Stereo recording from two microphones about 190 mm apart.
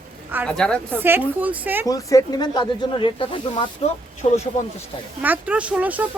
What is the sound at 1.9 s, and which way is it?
Speech, 15° left (ahead or behind).